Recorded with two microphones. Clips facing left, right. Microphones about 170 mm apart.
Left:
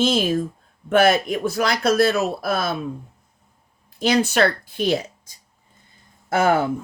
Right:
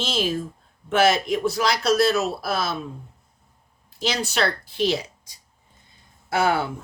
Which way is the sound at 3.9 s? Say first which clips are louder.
Left 6 dB; 55° left (ahead or behind).